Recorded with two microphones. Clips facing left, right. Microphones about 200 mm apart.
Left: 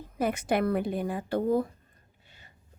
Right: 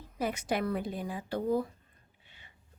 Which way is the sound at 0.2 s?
55° left (ahead or behind).